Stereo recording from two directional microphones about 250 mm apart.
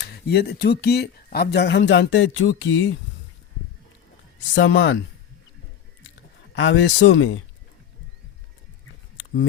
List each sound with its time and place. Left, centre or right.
0.0 s speech: left
4.5 s speech: left
6.5 s speech: left